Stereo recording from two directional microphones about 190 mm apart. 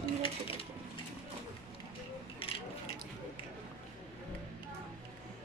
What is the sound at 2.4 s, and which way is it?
Ratchet, 30° left (ahead or behind).